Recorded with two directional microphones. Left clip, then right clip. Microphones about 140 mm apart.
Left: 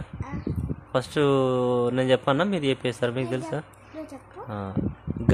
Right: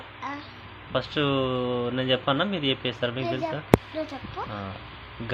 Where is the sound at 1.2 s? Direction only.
90° left.